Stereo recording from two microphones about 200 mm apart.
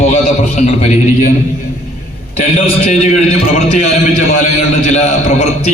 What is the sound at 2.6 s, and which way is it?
A man's voice, 35° left (ahead or behind).